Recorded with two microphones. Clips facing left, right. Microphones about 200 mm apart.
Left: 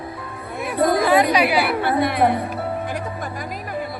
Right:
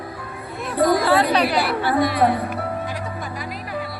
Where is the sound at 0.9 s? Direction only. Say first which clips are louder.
Left 1 dB; 15° left (ahead or behind).